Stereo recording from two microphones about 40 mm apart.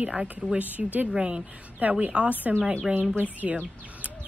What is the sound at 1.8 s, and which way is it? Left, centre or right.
Speech, right.